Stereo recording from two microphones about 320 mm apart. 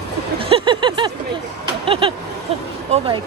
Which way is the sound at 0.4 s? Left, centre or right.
Centre.